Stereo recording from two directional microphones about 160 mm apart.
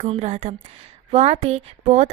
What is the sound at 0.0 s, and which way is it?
A woman's voice, 40° right (ahead or behind).